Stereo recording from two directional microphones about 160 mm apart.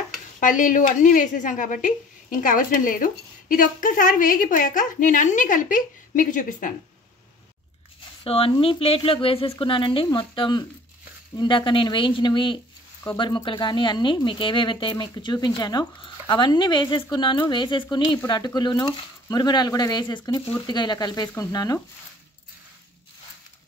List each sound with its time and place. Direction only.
0.4 s a woman's voice: 55° left (ahead or behind)
8.2 s speech: 35° left (ahead or behind)